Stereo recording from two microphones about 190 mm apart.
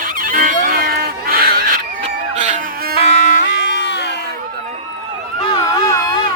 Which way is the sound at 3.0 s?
35° left (ahead or behind).